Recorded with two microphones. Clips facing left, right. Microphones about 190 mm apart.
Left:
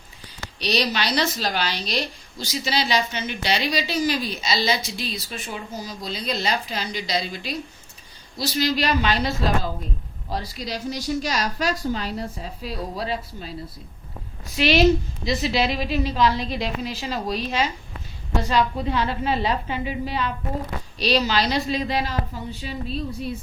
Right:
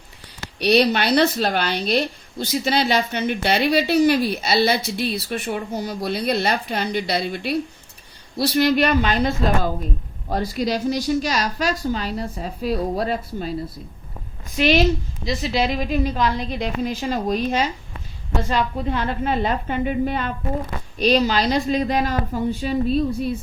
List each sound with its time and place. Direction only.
0.6 s a woman's voice: 60° right (ahead or behind)
14.5 s a woman's voice: 45° right (ahead or behind)